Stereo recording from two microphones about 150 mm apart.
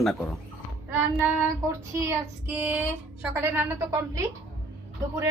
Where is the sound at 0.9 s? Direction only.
15° right (ahead or behind).